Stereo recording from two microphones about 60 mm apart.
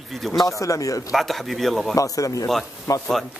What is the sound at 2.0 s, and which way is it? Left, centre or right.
Speech, left.